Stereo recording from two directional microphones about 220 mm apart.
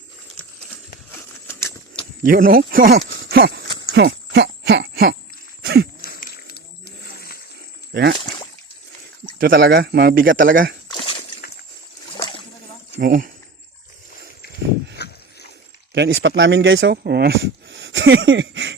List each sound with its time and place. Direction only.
1.5 s a sound: 10° left (ahead or behind)
2.2 s speech: 40° right (ahead or behind)
3.2 s horse: 45° right (ahead or behind)
3.8 s a sound: 50° right (ahead or behind)
6.0 s wild animals: 40° left (ahead or behind)
9.5 s speech: 45° right (ahead or behind)
10.8 s a sound: 25° left (ahead or behind)
12.1 s boat: 25° left (ahead or behind)
13.0 s speech: 40° right (ahead or behind)
14.9 s a sound: 50° left (ahead or behind)
16.0 s speech: 55° right (ahead or behind)
17.0 s speech: 45° right (ahead or behind)